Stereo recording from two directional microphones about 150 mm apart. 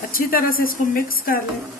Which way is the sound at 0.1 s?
75° left (ahead or behind).